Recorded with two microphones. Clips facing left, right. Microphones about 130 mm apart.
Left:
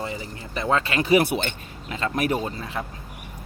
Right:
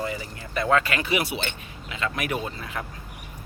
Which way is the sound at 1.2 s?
50° left (ahead or behind).